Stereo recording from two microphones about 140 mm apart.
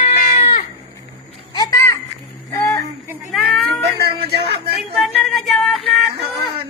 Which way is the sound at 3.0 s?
20° right (ahead or behind).